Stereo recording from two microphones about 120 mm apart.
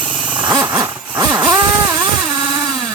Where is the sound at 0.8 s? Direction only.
35° right (ahead or behind).